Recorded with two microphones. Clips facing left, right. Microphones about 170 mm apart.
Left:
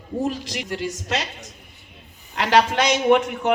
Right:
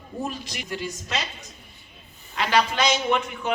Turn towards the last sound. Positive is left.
turn(degrees=75)  # may be behind; listen again after turning